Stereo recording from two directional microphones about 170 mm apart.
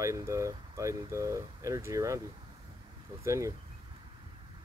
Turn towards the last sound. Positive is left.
turn(degrees=-15)  # may be behind; listen again after turning